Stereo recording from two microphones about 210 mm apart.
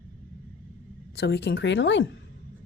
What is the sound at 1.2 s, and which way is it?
Speech, 50° left (ahead or behind).